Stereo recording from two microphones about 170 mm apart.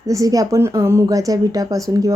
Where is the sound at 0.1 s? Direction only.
20° right (ahead or behind).